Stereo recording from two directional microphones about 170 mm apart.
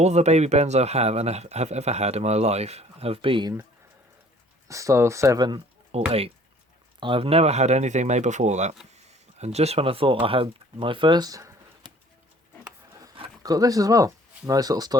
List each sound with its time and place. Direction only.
0.0 s speech: 40° right (ahead or behind)
4.7 s speech: 20° right (ahead or behind)
13.0 s speech: 25° right (ahead or behind)